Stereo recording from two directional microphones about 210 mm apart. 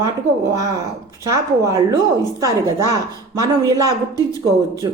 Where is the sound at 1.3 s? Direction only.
15° right (ahead or behind).